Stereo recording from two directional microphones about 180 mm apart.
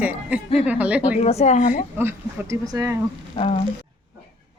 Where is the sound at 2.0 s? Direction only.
15° right (ahead or behind).